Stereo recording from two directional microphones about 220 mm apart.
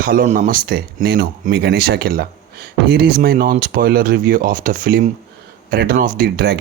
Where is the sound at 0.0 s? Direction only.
40° right (ahead or behind).